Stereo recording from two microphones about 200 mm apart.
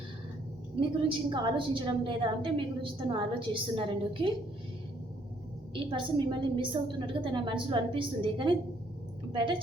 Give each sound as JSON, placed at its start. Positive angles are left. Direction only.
{"t": 0.8, "sound": "a woman's voice", "side_deg": -25}
{"t": 5.7, "sound": "a woman's voice", "side_deg": -25}